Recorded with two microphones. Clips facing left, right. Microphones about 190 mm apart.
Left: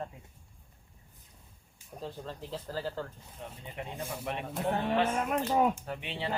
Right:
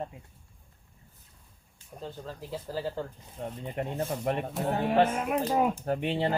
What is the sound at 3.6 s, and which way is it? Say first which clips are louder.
Speech: right 7 dB; 50° right (ahead or behind).